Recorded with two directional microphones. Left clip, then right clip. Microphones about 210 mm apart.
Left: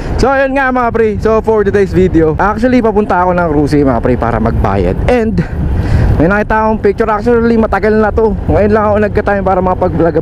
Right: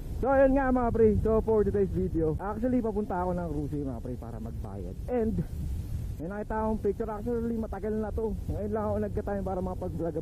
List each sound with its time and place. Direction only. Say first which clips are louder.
0.2 s speech: left 14 dB; 10° left (ahead or behind)